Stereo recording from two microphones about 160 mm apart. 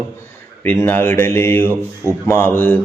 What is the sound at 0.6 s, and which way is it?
A man's voice, 10° left (ahead or behind).